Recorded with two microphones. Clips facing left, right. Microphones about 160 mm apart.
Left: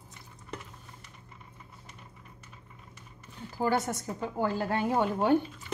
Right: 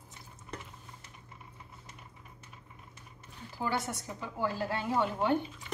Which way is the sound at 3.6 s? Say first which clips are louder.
Left 6 dB; 45° left (ahead or behind).